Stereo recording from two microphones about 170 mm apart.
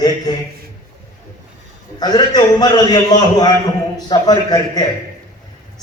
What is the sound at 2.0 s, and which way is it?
A man's voice, 25° left (ahead or behind).